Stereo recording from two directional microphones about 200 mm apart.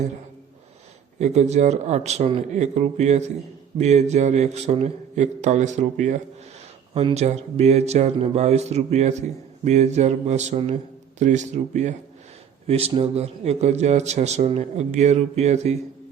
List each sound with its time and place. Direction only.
1.2 s speech: 35° right (ahead or behind)